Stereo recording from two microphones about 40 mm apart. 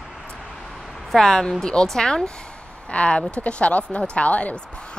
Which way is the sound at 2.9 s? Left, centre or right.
Left.